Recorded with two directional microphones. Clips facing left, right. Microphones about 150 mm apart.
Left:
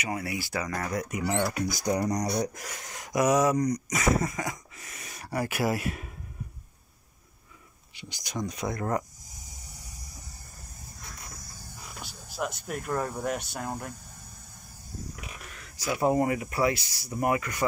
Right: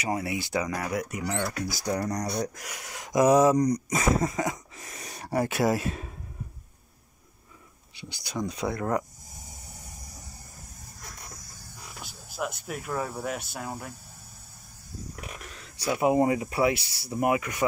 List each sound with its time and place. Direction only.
0.0 s speech: 25° right (ahead or behind)
0.7 s speech: 10° right (ahead or behind)
1.2 s speech: 25° left (ahead or behind)
2.8 s speech: 20° right (ahead or behind)
7.9 s speech: 20° left (ahead or behind)
8.6 s speech: 10° right (ahead or behind)
12.0 s speech: 5° right (ahead or behind)
16.0 s speech: 20° right (ahead or behind)